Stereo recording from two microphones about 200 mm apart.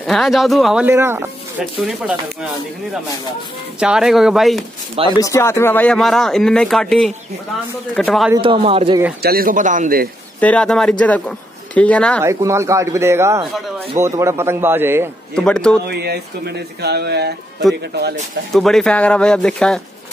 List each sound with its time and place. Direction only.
0.0 s speech: centre (ahead or behind)
3.8 s speech: 5° right (ahead or behind)
5.1 s speech: 15° left (ahead or behind)
8.4 s a man's voice: 25° right (ahead or behind)
9.2 s speech: 50° right (ahead or behind)
10.4 s speech: 5° left (ahead or behind)
12.2 s speech: 15° right (ahead or behind)
15.3 s speech: 5° left (ahead or behind)
15.9 s speech: 55° right (ahead or behind)
18.5 s speech: centre (ahead or behind)